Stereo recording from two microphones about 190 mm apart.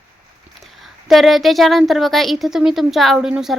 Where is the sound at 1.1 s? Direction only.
Centre (ahead or behind).